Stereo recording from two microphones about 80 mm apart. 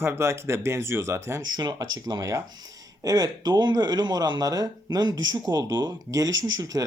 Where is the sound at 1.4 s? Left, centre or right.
Right.